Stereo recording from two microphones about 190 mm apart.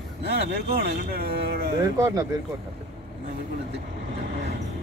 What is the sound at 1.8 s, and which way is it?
Speech, 15° right (ahead or behind).